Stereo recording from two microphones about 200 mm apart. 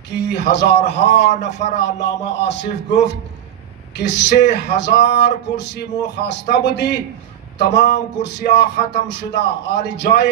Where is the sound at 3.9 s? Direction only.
60° left (ahead or behind).